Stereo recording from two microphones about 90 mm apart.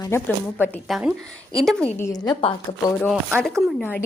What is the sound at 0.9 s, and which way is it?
Speech, centre (ahead or behind).